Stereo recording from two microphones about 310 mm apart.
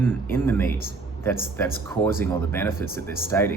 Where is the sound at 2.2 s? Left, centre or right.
Centre.